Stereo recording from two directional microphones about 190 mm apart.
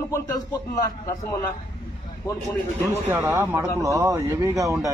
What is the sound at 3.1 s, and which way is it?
Speech, 15° right (ahead or behind).